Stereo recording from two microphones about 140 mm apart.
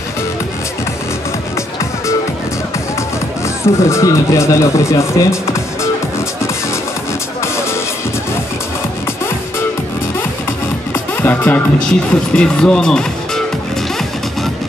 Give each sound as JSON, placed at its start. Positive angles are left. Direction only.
{"t": 3.6, "sound": "speech", "side_deg": 20}
{"t": 11.2, "sound": "music", "side_deg": 10}
{"t": 12.4, "sound": "speech", "side_deg": 5}